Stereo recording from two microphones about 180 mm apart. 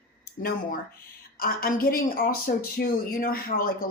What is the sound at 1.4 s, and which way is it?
Speech, 55° left (ahead or behind).